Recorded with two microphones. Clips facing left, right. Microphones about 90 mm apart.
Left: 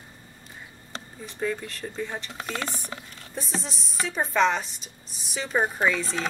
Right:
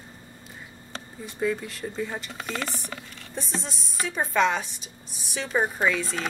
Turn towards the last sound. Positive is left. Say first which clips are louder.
# even
turn(degrees=0)  # may be behind; listen again after turning